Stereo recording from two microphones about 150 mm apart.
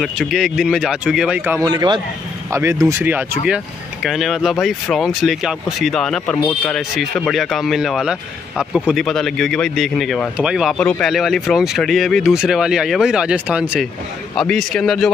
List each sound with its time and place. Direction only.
0.0 s speech: centre (ahead or behind)
1.6 s a man's voice: 25° right (ahead or behind); by 10.8 s 5° right (ahead or behind)
10.8 s speech: 5° left (ahead or behind)